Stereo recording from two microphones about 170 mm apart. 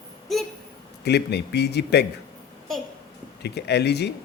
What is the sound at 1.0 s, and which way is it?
A man's voice, 75° left (ahead or behind).